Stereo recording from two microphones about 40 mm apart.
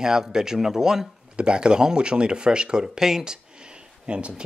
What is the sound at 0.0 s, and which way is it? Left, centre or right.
Speech, centre.